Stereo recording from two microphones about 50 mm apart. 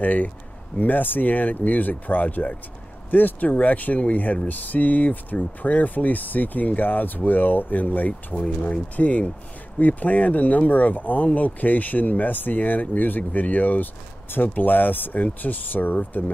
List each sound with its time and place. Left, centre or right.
0.0 s speech: left
8.4 s speech: centre
8.9 s speech: left